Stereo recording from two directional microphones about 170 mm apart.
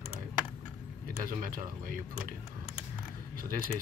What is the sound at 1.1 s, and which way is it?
Speech, 55° right (ahead or behind).